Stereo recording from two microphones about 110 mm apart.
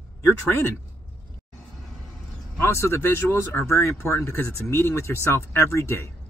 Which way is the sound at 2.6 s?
25° left (ahead or behind).